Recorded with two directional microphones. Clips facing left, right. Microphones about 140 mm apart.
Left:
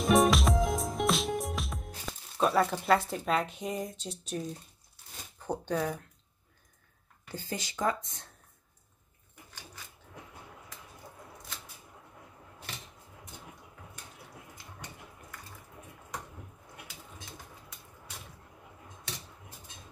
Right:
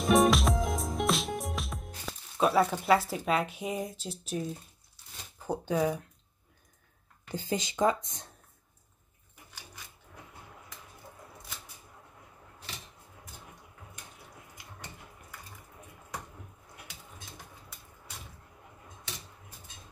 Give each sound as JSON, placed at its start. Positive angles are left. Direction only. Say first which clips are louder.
{"t": 0.0, "sound": "music", "louder": "right 1 dB", "side_deg": 0}
{"t": 5.4, "sound": "speech", "louder": "right 3 dB", "side_deg": -5}
{"t": 7.2, "sound": "speech", "louder": "right 5 dB", "side_deg": -20}